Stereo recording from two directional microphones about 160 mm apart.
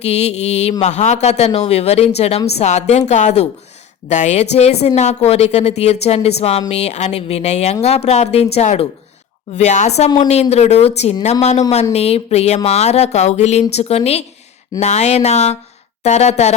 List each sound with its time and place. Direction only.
0.0 s speech: 40° left (ahead or behind)